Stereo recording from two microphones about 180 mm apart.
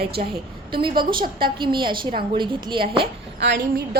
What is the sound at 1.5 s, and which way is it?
A woman's voice, 25° right (ahead or behind).